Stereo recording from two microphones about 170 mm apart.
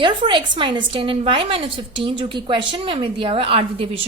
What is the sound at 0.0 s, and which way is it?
A woman's voice, 30° right (ahead or behind).